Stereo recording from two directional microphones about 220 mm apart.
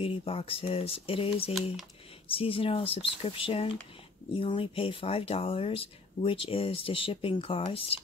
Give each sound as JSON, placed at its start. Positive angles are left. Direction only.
{"t": 0.0, "sound": "speech", "side_deg": 25}